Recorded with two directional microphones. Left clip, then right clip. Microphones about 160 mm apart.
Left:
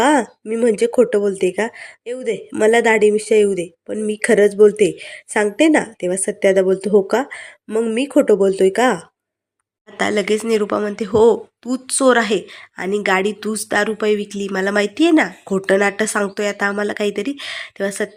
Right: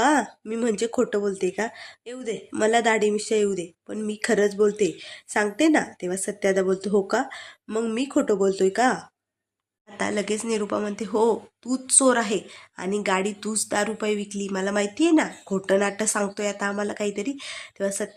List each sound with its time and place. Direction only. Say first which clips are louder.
0.0 s speech: left 6 dB; 15° left (ahead or behind)
10.0 s speech: left 9 dB; 25° left (ahead or behind)